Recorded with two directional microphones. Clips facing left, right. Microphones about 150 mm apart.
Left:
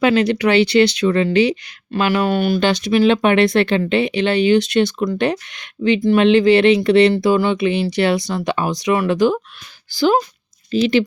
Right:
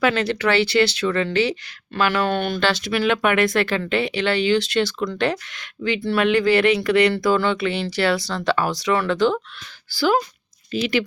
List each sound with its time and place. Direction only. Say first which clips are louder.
0.0 s speech: left 5 dB; 15° left (ahead or behind)